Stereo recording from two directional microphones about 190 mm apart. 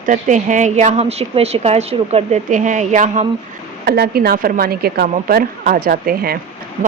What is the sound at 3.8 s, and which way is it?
A woman's voice, 55° right (ahead or behind).